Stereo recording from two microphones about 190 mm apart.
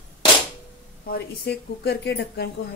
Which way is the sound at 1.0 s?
55° left (ahead or behind).